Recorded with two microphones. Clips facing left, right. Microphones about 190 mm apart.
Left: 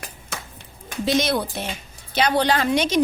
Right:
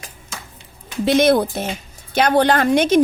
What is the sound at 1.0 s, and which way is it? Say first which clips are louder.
A woman's voice: right 7 dB; 55° right (ahead or behind).